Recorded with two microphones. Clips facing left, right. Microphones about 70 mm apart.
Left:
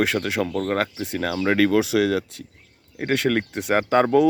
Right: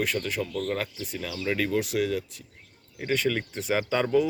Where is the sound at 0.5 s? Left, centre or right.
Left.